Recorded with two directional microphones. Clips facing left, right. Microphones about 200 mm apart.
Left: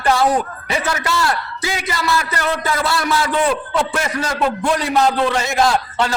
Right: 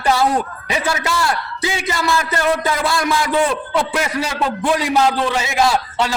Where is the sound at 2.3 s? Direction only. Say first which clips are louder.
Right 3 dB; 15° right (ahead or behind).